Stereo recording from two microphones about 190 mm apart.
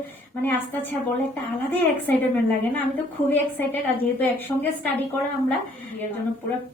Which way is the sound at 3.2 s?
10° left (ahead or behind).